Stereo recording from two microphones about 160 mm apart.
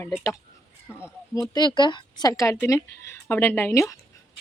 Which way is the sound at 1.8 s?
30° left (ahead or behind).